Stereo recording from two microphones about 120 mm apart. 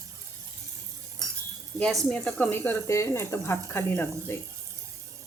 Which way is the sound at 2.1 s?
10° left (ahead or behind).